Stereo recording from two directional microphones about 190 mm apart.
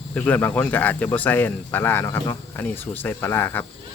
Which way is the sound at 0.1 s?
10° left (ahead or behind).